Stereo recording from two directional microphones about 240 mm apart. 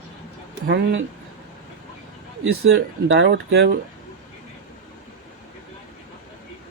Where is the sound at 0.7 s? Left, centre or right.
Right.